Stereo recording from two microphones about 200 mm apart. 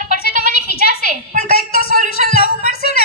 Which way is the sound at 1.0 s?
40° right (ahead or behind).